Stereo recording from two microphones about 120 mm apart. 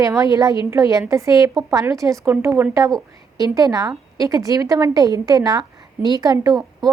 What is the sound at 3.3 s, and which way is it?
A woman's voice, 30° right (ahead or behind).